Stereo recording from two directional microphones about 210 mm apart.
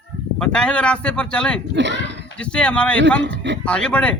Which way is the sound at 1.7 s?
55° right (ahead or behind).